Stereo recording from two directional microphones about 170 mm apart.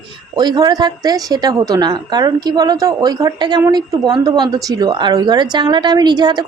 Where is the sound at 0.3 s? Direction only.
25° right (ahead or behind).